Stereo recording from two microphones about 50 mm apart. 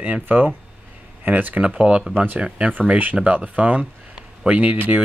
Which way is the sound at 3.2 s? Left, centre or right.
Right.